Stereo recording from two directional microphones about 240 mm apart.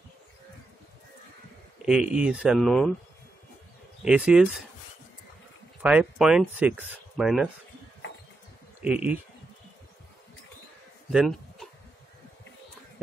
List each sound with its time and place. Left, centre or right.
1.9 s speech: centre
4.0 s speech: centre
5.8 s speech: centre
8.8 s speech: centre
11.1 s a sound: centre